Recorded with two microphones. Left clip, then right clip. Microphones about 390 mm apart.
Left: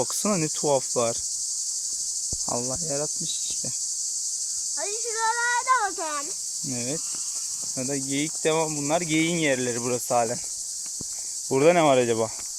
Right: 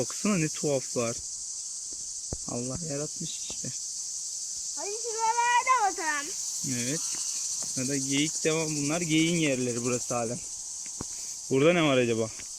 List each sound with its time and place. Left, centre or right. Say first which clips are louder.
0.2 s speech: left 4 dB; centre
2.6 s speech: left 6 dB; centre
5.0 s a sound: left 1 dB; centre
6.7 s speech: left 1 dB; centre
9.0 s cricket: right 1 dB; left
9.6 s speech: left 3 dB; centre
11.5 s speech: left 5 dB; centre